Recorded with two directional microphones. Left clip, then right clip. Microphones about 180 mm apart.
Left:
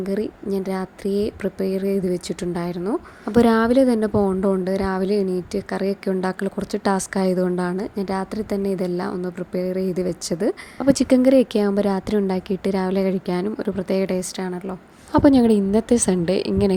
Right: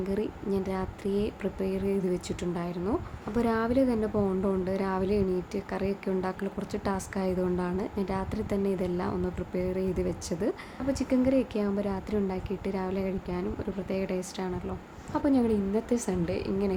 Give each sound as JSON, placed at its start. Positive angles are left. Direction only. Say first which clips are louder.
{"t": 0.0, "sound": "a woman's voice", "louder": "left 6 dB", "side_deg": 35}